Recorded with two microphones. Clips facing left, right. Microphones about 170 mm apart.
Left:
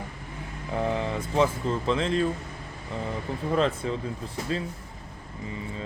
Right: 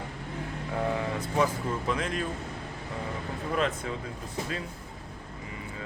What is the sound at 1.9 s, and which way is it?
Speech, 25° left (ahead or behind).